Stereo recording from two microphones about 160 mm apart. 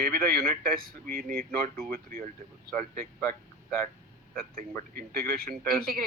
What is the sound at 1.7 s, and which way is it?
Speech, centre (ahead or behind).